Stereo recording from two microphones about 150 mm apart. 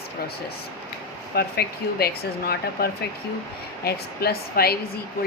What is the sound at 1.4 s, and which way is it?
Speech, 90° left.